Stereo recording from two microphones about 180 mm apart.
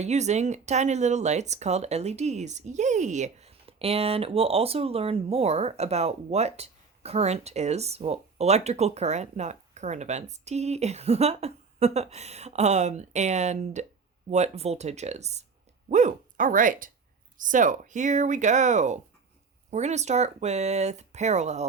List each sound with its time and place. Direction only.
0.0 s speech: 40° right (ahead or behind)